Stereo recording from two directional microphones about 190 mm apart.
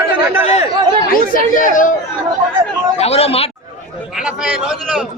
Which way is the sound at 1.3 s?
45° left (ahead or behind).